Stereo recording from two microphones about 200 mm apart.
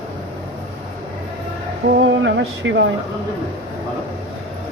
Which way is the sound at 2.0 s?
65° right (ahead or behind).